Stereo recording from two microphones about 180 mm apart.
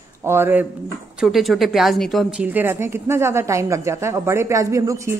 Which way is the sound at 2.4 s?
10° right (ahead or behind).